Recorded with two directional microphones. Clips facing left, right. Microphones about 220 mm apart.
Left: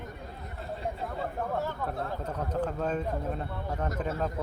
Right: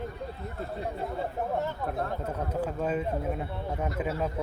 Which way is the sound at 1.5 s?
20° right (ahead or behind).